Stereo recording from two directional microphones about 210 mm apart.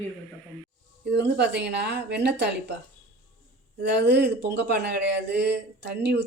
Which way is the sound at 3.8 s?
55° right (ahead or behind).